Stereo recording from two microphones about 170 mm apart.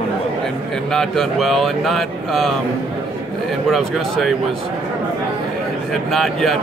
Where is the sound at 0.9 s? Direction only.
5° left (ahead or behind).